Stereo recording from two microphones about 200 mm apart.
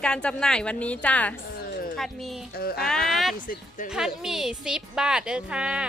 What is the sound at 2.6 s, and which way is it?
Speech, 50° left (ahead or behind).